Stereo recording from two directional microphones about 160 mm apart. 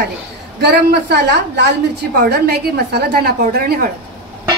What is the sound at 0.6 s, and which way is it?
A woman's voice, 90° right.